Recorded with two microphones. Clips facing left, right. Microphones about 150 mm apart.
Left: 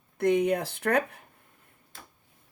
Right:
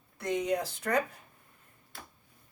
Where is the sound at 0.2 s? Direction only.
60° left (ahead or behind).